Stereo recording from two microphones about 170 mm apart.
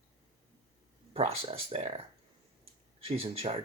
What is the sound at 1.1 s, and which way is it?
Speech, 35° right (ahead or behind).